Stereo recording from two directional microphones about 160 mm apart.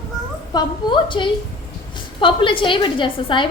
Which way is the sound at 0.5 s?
30° left (ahead or behind).